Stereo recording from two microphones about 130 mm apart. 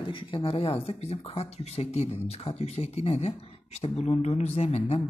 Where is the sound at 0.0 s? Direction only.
40° left (ahead or behind).